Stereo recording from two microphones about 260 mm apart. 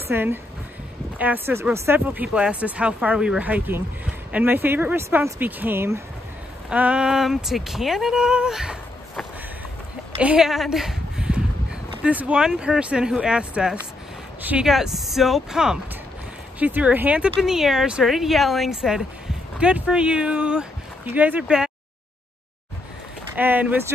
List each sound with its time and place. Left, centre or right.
0.1 s speech: centre
10.2 s speech: centre
23.3 s speech: centre